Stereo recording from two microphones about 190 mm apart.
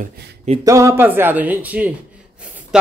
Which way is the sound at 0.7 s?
15° right (ahead or behind).